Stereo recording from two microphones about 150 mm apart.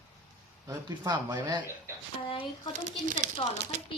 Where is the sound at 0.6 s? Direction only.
25° right (ahead or behind).